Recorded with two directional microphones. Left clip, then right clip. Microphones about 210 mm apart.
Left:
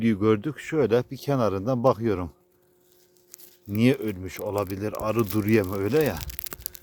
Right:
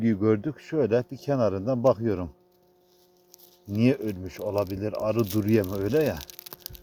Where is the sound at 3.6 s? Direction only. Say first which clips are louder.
Left 1 dB; 15° left (ahead or behind).